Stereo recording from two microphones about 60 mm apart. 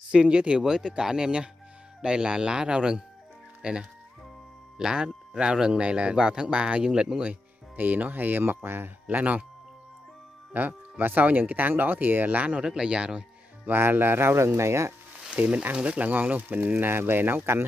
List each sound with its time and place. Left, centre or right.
0.1 s speech: centre
7.7 s speech: right
9.1 s speech: right
10.5 s speech: right
13.7 s speech: right
15.2 s speech: right